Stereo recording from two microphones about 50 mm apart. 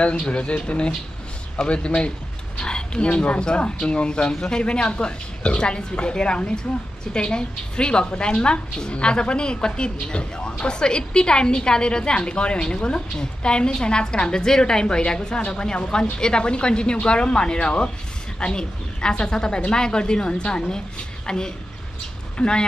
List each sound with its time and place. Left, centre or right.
0.0 s a woman's voice: left